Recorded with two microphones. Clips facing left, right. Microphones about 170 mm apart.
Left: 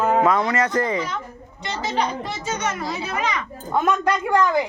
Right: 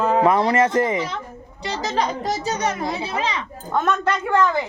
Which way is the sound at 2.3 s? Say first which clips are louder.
Right 4 dB; 35° right (ahead or behind).